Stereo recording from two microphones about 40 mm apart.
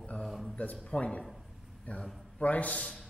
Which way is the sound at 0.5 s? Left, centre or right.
Left.